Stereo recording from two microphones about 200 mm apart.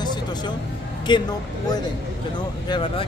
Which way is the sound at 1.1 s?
25° left (ahead or behind).